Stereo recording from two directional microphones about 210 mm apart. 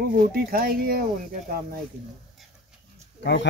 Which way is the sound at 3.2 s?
55° left (ahead or behind).